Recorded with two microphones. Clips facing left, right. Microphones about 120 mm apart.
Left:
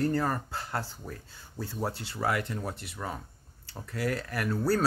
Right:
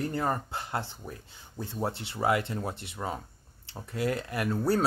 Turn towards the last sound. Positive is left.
turn(degrees=-25)  # may be behind; listen again after turning